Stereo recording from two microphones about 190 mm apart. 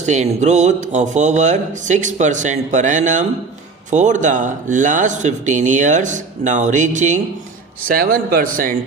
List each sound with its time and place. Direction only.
0.0 s a man's voice: 35° right (ahead or behind)